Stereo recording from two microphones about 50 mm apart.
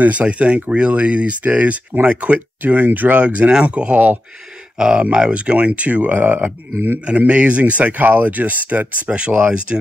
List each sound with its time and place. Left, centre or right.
0.0 s speech: right
4.7 s speech: centre